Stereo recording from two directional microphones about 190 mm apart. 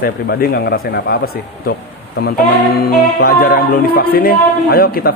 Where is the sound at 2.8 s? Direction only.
50° left (ahead or behind).